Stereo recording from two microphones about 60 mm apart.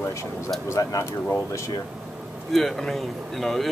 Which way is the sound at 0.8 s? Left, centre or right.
Left.